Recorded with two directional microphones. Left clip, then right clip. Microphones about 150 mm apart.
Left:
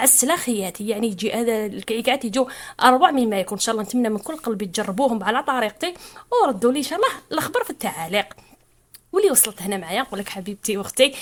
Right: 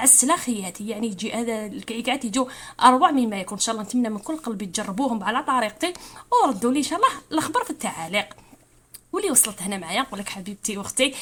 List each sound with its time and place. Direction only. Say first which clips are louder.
0.0 s a woman's voice: left 1 dB; 30° left (ahead or behind)